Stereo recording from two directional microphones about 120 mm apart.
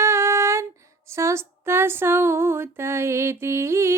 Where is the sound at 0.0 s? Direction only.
20° right (ahead or behind).